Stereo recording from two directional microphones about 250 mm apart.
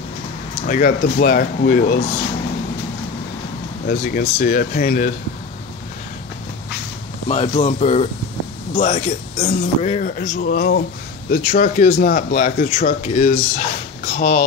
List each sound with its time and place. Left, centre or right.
0.7 s speech: left
3.8 s speech: left
7.2 s speech: left